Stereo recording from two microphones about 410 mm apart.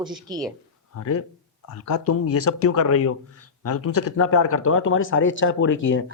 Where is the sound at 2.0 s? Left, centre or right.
Left.